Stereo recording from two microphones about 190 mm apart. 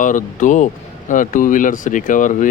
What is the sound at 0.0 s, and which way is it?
Speech, 40° left (ahead or behind).